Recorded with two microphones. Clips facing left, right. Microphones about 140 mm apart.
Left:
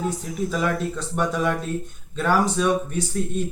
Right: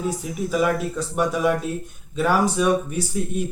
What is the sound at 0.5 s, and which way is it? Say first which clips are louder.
Speech: right 5 dB; 10° right (ahead or behind).